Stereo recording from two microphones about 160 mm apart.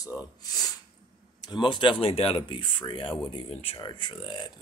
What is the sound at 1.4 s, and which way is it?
Speech, 30° left (ahead or behind).